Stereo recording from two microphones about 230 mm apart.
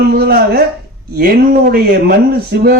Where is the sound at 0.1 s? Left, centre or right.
Right.